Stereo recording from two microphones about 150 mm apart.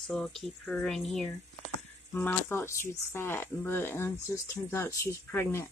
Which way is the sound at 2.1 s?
15° left (ahead or behind).